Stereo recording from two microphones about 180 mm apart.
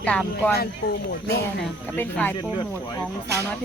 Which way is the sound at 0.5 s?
60° left (ahead or behind).